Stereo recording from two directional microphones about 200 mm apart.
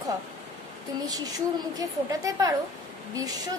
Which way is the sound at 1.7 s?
20° right (ahead or behind).